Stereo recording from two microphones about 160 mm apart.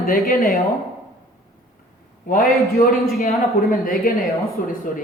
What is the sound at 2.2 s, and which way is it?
Speech, 55° left (ahead or behind).